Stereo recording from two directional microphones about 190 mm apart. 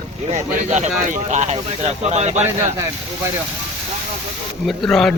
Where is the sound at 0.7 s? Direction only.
40° right (ahead or behind).